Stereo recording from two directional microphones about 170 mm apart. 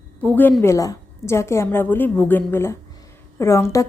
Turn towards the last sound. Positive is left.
turn(degrees=15)  # may be behind; listen again after turning